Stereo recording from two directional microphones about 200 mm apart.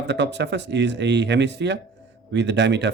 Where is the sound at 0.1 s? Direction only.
60° right (ahead or behind).